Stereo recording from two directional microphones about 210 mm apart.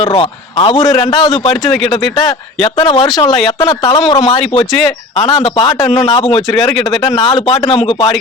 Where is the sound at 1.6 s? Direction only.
Centre (ahead or behind).